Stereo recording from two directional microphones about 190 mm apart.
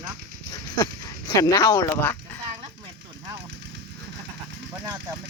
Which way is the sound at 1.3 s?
20° left (ahead or behind).